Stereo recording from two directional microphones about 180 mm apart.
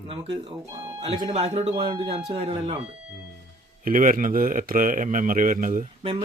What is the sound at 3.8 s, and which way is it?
A man's voice, 50° right (ahead or behind).